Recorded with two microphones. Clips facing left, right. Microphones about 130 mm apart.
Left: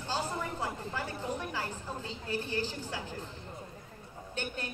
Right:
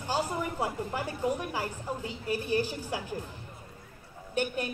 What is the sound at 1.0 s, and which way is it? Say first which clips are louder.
A woman's voice: right 7 dB; 15° right (ahead or behind).